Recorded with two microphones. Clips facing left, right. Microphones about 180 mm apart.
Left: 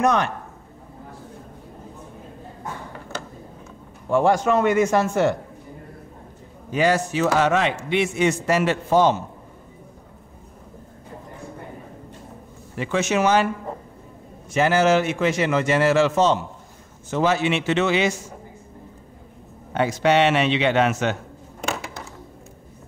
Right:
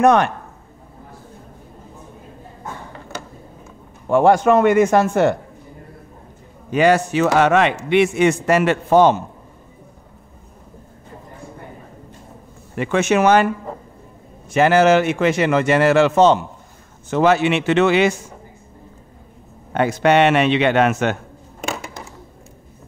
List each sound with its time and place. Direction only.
0.0 s a man's voice: 60° right (ahead or behind)
4.1 s a man's voice: 60° right (ahead or behind)
6.7 s a man's voice: 65° right (ahead or behind)
12.7 s a man's voice: 60° right (ahead or behind)
14.5 s a man's voice: 60° right (ahead or behind)
19.7 s a man's voice: 55° right (ahead or behind)